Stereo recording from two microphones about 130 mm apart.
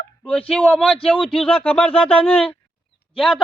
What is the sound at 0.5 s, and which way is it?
Speech, 5° left (ahead or behind).